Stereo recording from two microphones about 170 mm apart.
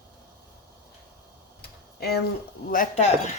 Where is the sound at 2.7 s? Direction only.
45° left (ahead or behind).